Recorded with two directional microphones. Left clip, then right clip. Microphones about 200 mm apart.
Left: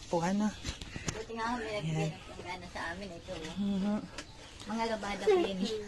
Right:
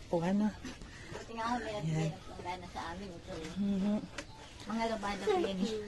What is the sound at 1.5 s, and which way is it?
Speech, 10° right (ahead or behind).